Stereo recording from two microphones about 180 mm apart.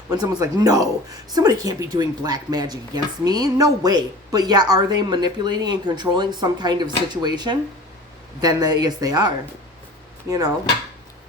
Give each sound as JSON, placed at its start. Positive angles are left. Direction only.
{"t": 0.1, "sound": "speech", "side_deg": -20}